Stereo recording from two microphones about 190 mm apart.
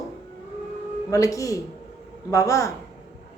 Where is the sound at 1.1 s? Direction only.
15° left (ahead or behind).